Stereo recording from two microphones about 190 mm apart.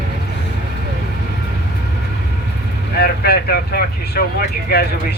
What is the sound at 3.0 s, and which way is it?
Speech, 55° left (ahead or behind).